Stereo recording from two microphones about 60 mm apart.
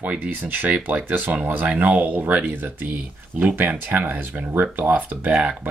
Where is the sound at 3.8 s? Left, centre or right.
Right.